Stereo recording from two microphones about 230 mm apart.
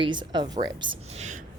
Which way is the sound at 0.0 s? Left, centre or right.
Centre.